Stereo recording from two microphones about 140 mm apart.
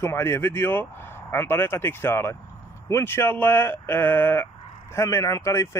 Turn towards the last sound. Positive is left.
turn(degrees=20)  # may be behind; listen again after turning